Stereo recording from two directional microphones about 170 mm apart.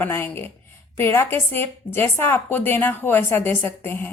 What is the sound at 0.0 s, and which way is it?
A woman's voice, 15° left (ahead or behind).